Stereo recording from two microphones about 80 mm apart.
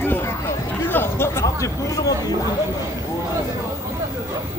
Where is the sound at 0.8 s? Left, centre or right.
Left.